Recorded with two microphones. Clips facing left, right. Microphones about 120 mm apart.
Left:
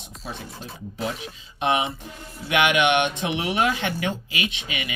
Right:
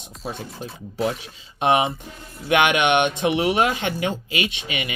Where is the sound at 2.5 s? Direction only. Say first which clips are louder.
Right 2 dB; 25° right (ahead or behind).